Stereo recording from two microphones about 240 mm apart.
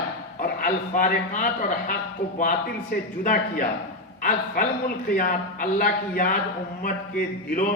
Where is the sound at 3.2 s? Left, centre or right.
Left.